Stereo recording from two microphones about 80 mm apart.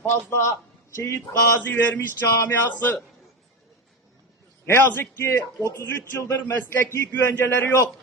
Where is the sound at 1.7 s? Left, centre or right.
Left.